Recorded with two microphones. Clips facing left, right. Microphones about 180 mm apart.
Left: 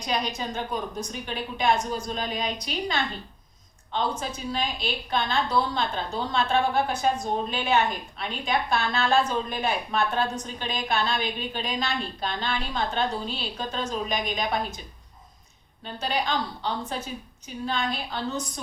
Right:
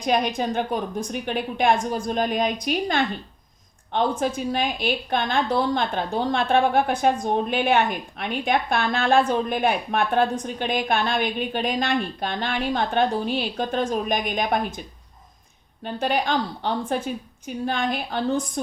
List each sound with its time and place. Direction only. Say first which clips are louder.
0.0 s a woman's voice: right 7 dB; 55° right (ahead or behind)
15.8 s a woman's voice: right 5 dB; 55° right (ahead or behind)